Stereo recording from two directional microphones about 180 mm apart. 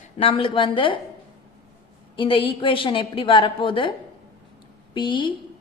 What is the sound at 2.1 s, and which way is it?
A woman's voice, 30° left (ahead or behind).